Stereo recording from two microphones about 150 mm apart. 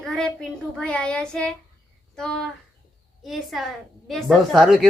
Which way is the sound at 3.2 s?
Centre (ahead or behind).